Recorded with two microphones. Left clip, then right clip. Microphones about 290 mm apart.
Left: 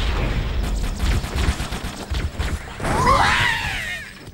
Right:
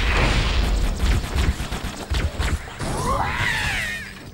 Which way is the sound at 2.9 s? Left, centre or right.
Left.